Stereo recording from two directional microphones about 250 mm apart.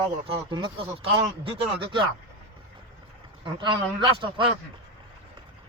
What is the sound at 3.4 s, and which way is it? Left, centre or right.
A man's voice, centre.